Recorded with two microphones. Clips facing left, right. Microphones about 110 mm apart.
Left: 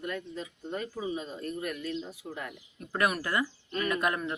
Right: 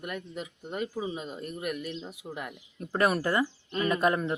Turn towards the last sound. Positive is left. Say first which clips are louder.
# right 4 dB
turn(degrees=-25)  # may be behind; listen again after turning